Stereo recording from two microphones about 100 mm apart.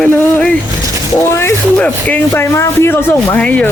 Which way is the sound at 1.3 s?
25° left (ahead or behind).